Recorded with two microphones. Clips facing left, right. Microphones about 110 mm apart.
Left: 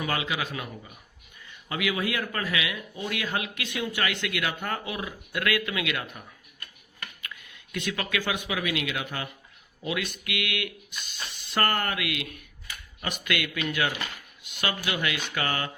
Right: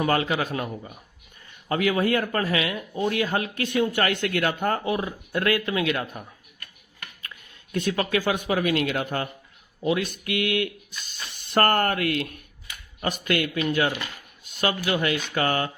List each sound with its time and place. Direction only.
0.0 s a man's voice: 45° right (ahead or behind)
1.7 s speech: 40° right (ahead or behind)
11.3 s speech: 50° right (ahead or behind)